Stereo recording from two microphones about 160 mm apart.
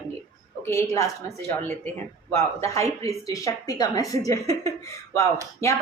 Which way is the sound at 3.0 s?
20° left (ahead or behind).